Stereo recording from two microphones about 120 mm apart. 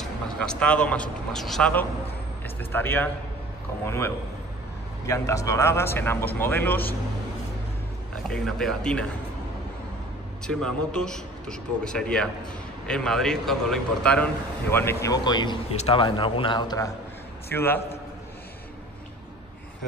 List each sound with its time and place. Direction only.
0.0 s speech: 5° left (ahead or behind)
2.4 s speech: 20° left (ahead or behind)
8.3 s a man's voice: 5° left (ahead or behind)
10.4 s a man's voice: 5° left (ahead or behind); by 15.5 s 40° left (ahead or behind)
15.7 s a man's voice: 65° left (ahead or behind)
16.0 s a man's voice: 45° left (ahead or behind)
17.5 s speech: 20° left (ahead or behind)